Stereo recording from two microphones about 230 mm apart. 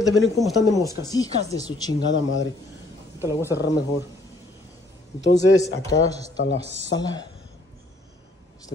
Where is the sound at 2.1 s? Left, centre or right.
Left.